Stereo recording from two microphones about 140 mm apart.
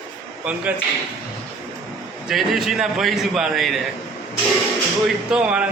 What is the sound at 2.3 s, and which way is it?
A man's voice, 5° right (ahead or behind).